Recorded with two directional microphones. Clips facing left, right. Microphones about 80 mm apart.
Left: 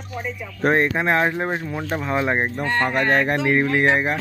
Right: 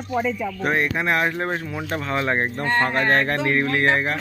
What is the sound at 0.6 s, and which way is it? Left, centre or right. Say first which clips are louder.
Speech: left 6 dB; left.